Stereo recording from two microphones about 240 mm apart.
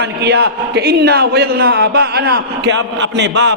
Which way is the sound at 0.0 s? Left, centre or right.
Right.